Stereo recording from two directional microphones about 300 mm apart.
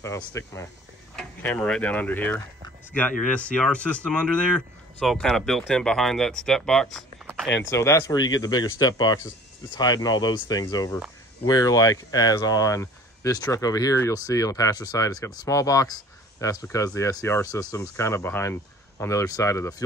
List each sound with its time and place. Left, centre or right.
0.3 s speech: centre
7.4 s speech: left
7.7 s speech: centre